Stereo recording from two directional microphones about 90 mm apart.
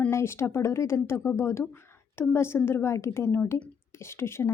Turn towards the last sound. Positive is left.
turn(degrees=30)  # may be behind; listen again after turning